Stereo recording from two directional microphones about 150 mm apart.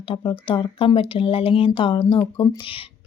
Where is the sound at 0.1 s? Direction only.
35° left (ahead or behind).